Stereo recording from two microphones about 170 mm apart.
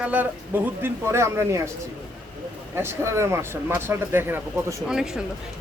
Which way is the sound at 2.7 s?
15° right (ahead or behind).